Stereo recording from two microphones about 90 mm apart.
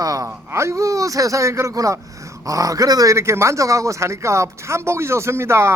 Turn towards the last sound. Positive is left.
turn(degrees=-30)  # may be behind; listen again after turning